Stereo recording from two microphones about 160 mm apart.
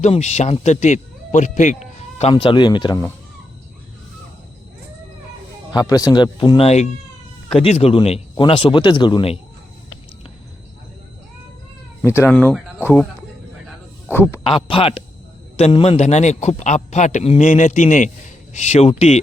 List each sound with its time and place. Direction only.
0.0 s speech: 45° left (ahead or behind)
2.3 s speech: 30° left (ahead or behind)
5.7 s speech: 20° left (ahead or behind)
12.0 s speech: 15° left (ahead or behind)
14.1 s speech: 15° left (ahead or behind)
14.4 s a man's voice: 35° left (ahead or behind)